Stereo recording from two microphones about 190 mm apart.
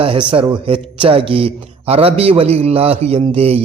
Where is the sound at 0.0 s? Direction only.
25° right (ahead or behind).